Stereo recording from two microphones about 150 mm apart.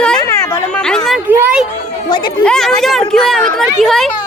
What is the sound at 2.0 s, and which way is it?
Speech, 30° left (ahead or behind).